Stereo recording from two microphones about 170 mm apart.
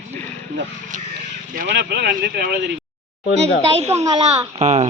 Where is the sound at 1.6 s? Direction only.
90° right; by 2.7 s 70° right (ahead or behind).